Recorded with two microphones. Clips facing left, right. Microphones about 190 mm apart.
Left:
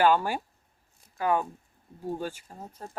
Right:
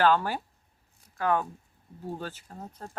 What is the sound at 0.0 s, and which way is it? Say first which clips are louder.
Speech: left 1 dB; 10° left (ahead or behind).